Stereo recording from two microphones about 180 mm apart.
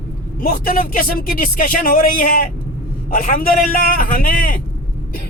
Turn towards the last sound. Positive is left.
turn(degrees=50)  # may be behind; listen again after turning